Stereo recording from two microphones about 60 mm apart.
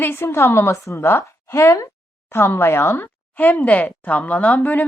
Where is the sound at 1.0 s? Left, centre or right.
Left.